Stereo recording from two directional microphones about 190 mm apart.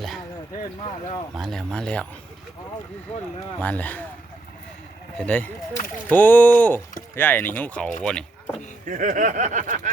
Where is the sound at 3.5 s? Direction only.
10° left (ahead or behind).